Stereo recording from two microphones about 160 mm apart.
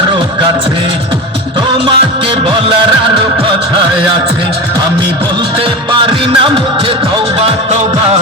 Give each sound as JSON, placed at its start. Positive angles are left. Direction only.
{"t": 1.8, "sound": "music", "side_deg": -35}
{"t": 5.5, "sound": "music", "side_deg": -35}